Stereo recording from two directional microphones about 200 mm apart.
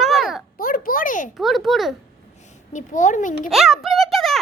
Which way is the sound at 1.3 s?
Centre (ahead or behind).